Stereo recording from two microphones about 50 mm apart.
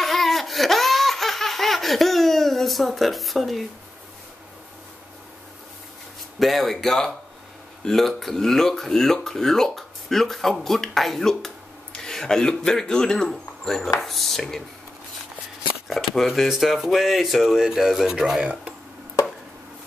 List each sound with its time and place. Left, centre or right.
0.0 s laughter: centre
6.4 s speech: centre
15.9 s speech: centre
18.4 s speech: right
19.2 s chopping: left